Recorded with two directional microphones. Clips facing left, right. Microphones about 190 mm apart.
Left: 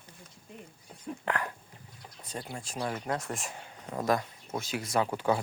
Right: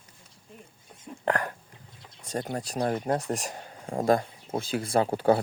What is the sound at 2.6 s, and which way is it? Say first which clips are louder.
Speech: right 6 dB; 40° right (ahead or behind).